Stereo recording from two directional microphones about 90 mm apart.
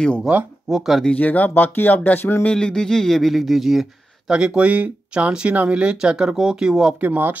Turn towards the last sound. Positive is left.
turn(degrees=-20)  # may be behind; listen again after turning